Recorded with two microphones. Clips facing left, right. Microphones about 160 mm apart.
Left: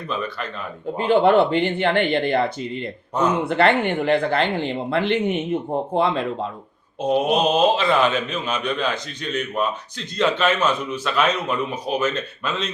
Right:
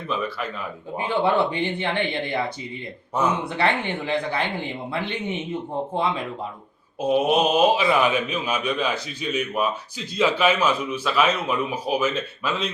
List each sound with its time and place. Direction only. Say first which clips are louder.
0.1 s speech: right 1 dB; 5° right (ahead or behind)
1.0 s speech: left 6 dB; 60° left (ahead or behind)
3.1 s speech: left 2 dB; 5° right (ahead or behind)
3.5 s speech: left 6 dB; 60° left (ahead or behind)
7.0 s speech: left 1 dB; 5° right (ahead or behind)